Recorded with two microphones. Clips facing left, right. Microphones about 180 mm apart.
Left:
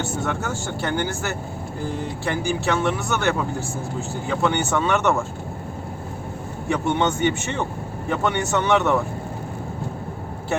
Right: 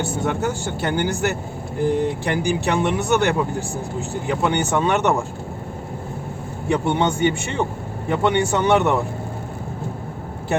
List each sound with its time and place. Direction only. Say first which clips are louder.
0.0 s speech: right 4 dB; 15° right (ahead or behind)
6.7 s speech: right 2 dB; 15° right (ahead or behind)